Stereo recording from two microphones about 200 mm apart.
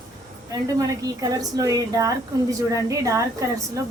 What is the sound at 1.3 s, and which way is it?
A woman's voice, 15° right (ahead or behind).